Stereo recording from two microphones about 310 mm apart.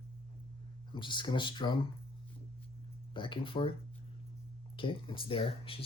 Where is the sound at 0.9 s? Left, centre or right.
Centre.